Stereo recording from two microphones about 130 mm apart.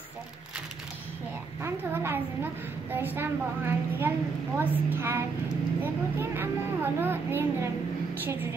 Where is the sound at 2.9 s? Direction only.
15° right (ahead or behind).